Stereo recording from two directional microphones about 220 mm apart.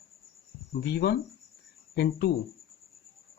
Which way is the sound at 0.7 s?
45° left (ahead or behind).